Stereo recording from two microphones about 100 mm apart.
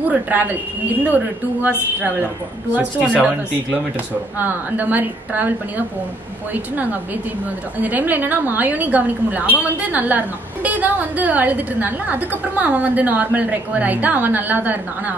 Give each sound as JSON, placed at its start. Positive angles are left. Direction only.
{"t": 0.1, "sound": "a woman's voice", "side_deg": -15}
{"t": 2.7, "sound": "a woman's voice", "side_deg": -10}
{"t": 4.4, "sound": "a woman's voice", "side_deg": -20}
{"t": 6.5, "sound": "a woman's voice", "side_deg": -15}